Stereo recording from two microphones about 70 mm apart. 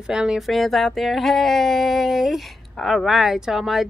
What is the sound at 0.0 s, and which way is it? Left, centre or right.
Speech, centre.